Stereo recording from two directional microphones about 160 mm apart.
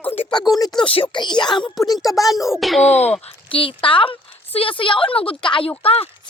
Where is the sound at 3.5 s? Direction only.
30° left (ahead or behind).